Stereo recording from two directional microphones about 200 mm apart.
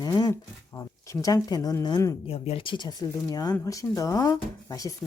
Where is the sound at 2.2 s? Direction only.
30° left (ahead or behind).